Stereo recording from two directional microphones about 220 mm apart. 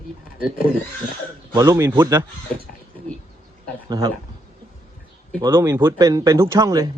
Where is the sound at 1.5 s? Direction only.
15° right (ahead or behind).